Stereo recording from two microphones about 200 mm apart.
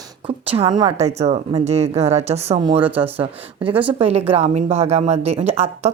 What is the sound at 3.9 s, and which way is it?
A woman's voice, 30° right (ahead or behind).